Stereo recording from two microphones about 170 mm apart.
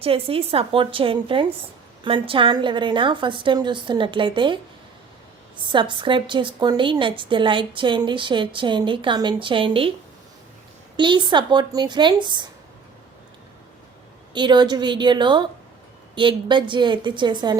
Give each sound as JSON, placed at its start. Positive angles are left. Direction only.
{"t": 0.0, "sound": "a woman's voice", "side_deg": -35}
{"t": 5.6, "sound": "a woman's voice", "side_deg": -30}
{"t": 10.9, "sound": "a woman's voice", "side_deg": -30}
{"t": 14.3, "sound": "a woman's voice", "side_deg": -25}